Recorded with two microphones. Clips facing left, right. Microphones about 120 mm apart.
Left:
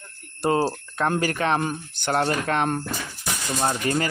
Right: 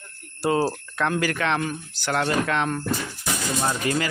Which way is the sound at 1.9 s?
55° left (ahead or behind).